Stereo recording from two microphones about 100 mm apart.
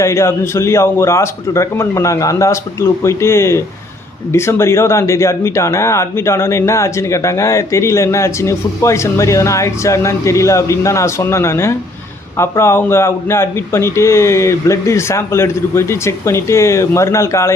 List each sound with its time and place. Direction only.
0.0 s speech: 30° left (ahead or behind)